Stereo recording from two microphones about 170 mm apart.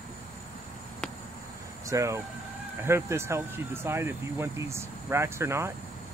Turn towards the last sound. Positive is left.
turn(degrees=-15)  # may be behind; listen again after turning